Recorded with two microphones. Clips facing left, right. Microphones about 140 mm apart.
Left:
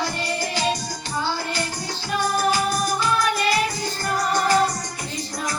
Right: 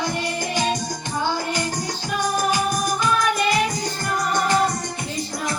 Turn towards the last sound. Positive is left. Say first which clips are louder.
# left 1 dB
turn(degrees=-20)  # may be behind; listen again after turning